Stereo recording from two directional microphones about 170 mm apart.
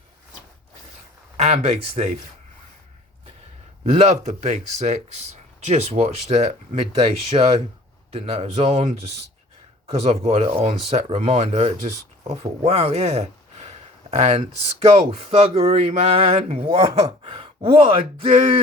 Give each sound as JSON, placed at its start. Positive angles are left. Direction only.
{"t": 1.4, "sound": "speech", "side_deg": -40}
{"t": 3.8, "sound": "speech", "side_deg": -40}